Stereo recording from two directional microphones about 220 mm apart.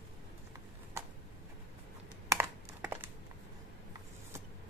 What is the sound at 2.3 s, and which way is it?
Computer keyboard, 10° right (ahead or behind).